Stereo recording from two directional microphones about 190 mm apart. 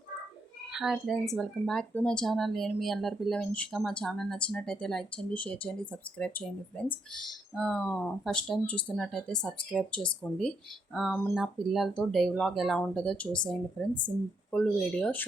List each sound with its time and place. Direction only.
0.7 s speech: 5° right (ahead or behind)